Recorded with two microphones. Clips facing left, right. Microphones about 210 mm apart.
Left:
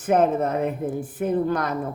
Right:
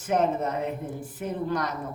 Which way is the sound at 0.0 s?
55° left (ahead or behind).